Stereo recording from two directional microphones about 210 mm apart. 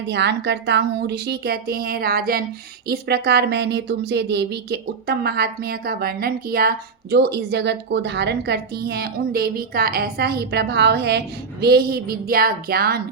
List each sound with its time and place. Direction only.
0.1 s a woman's voice: 55° right (ahead or behind)